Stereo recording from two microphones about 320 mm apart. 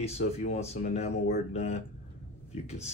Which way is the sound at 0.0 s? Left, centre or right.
Centre.